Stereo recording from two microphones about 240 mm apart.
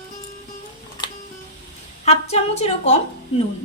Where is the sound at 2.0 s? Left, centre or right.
Left.